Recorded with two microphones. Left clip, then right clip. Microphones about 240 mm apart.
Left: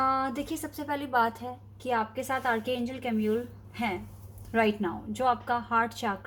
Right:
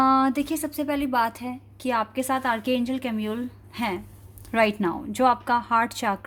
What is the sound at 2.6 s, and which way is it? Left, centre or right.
Speech, right.